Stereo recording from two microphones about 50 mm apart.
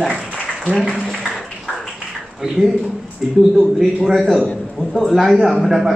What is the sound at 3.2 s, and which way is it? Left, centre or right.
A man's voice, centre.